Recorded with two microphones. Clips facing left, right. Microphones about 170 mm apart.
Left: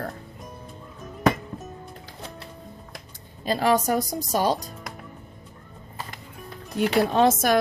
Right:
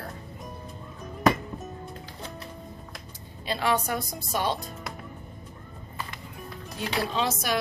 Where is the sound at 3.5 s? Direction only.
40° left (ahead or behind).